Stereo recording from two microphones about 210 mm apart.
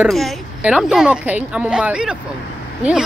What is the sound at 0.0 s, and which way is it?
Speech, centre (ahead or behind).